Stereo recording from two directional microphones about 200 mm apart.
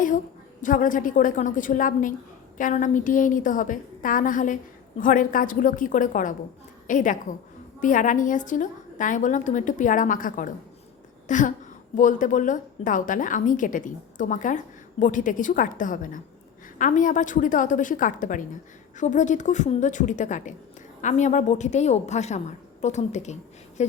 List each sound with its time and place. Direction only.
0.6 s a woman's voice: 40° left (ahead or behind)